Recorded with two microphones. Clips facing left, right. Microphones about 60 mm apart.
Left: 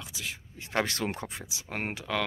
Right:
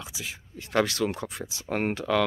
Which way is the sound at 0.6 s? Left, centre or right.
Centre.